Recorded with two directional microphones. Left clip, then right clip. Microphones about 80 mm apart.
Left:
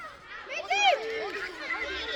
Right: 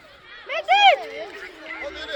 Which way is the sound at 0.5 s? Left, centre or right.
Right.